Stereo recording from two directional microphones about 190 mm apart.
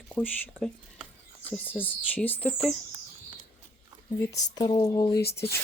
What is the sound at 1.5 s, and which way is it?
Speech, 10° left (ahead or behind).